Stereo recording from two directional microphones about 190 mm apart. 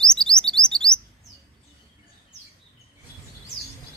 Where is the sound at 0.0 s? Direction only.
5° left (ahead or behind).